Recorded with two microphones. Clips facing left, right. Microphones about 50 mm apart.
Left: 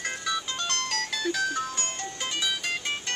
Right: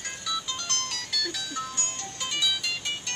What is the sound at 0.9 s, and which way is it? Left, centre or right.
Music, left.